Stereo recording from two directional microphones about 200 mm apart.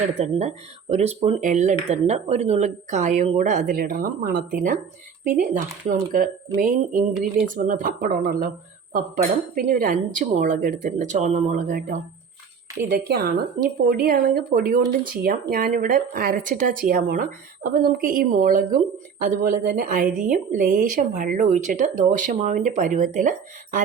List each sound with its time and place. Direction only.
0.1 s speech: 30° right (ahead or behind)